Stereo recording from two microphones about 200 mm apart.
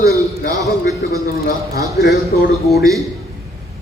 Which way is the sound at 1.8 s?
50° left (ahead or behind).